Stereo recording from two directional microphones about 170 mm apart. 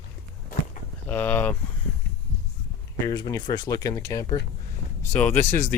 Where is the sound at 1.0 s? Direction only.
10° left (ahead or behind).